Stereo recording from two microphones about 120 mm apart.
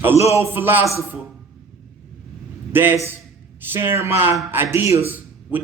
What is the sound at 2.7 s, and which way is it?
A man's voice, 20° right (ahead or behind).